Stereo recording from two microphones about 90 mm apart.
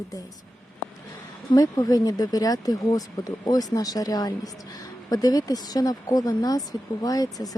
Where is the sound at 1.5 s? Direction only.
45° left (ahead or behind).